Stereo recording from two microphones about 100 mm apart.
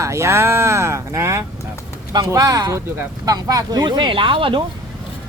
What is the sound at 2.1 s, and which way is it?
Speech, 40° right (ahead or behind).